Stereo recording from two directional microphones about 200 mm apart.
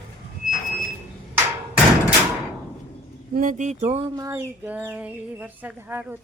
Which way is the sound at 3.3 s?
40° right (ahead or behind).